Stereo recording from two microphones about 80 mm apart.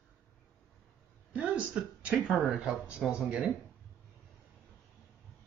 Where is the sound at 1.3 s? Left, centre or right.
Centre.